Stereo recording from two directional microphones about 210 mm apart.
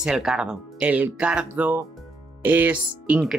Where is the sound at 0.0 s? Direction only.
5° right (ahead or behind).